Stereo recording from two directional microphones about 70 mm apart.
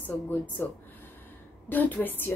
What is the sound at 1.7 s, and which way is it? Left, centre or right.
Speech, left.